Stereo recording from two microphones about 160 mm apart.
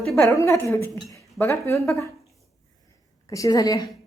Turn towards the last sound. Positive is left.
turn(degrees=20)  # may be behind; listen again after turning